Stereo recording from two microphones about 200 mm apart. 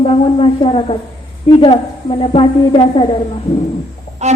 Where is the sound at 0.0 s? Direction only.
30° left (ahead or behind).